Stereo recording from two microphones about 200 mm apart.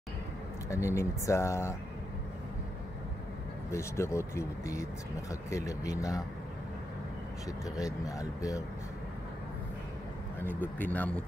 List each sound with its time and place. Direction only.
0.7 s speech: 15° left (ahead or behind)
3.7 s speech: 15° left (ahead or behind)
7.7 s speech: 15° left (ahead or behind)
10.4 s speech: 10° left (ahead or behind)